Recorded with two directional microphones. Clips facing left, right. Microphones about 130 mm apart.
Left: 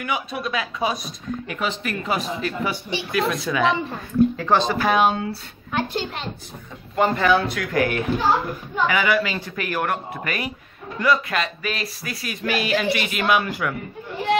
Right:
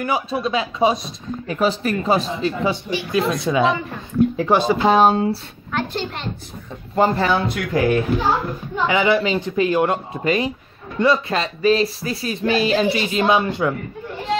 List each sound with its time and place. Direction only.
0.0 s speech: 30° right (ahead or behind)
1.6 s speech: 35° right (ahead or behind)
4.4 s speech: 10° right (ahead or behind)
4.7 s speech: 30° right (ahead or behind)
5.7 s a child's voice: 10° left (ahead or behind)
7.0 s speech: 35° right (ahead or behind)